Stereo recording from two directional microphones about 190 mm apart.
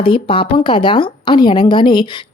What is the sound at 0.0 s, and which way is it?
Speech, 30° left (ahead or behind).